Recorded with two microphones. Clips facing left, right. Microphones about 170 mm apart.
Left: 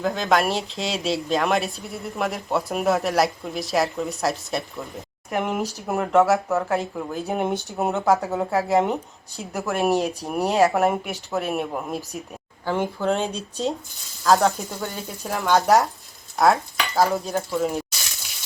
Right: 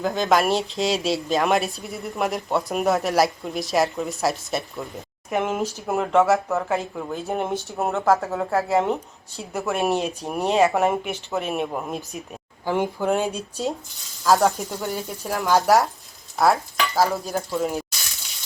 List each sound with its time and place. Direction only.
0.0 s speech: centre (ahead or behind)
12.6 s speech: 15° right (ahead or behind)
14.3 s speech: centre (ahead or behind)